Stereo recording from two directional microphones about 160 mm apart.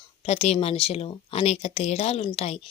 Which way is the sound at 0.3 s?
40° left (ahead or behind).